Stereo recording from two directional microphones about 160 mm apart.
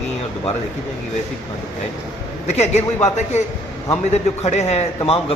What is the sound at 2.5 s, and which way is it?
A man's voice, 45° left (ahead or behind).